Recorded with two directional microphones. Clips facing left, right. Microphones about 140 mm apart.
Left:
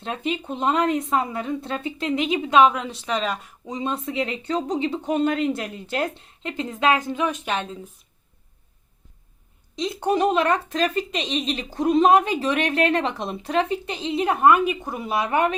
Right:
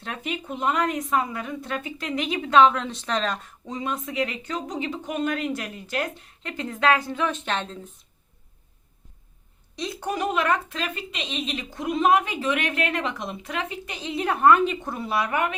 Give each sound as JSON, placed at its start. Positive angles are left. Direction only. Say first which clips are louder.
{"t": 0.0, "sound": "speech", "louder": "left 5 dB", "side_deg": 25}
{"t": 3.8, "sound": "speech", "louder": "left 2 dB", "side_deg": 30}
{"t": 9.7, "sound": "a woman's voice", "louder": "left 6 dB", "side_deg": 20}